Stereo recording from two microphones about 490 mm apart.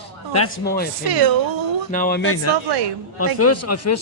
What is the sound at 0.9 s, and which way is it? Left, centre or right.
Speech, right.